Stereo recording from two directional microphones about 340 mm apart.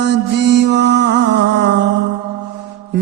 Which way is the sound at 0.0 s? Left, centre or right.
Right.